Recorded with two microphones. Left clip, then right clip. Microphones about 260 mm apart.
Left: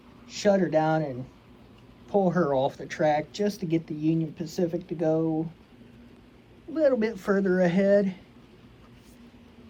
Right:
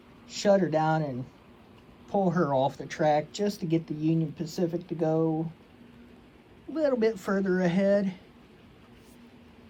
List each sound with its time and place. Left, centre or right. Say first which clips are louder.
0.3 s speech: even; centre
6.7 s speech: left 2 dB; centre